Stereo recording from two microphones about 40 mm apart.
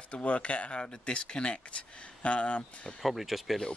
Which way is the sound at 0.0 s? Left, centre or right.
Left.